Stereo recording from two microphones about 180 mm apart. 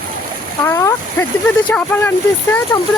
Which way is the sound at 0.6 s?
15° left (ahead or behind).